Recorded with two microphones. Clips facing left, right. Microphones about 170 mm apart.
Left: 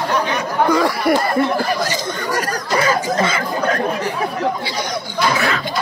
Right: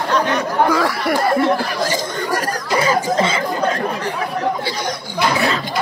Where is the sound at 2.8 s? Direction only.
25° right (ahead or behind).